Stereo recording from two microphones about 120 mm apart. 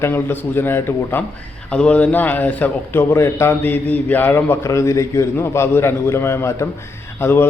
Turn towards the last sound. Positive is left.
turn(degrees=20)  # may be behind; listen again after turning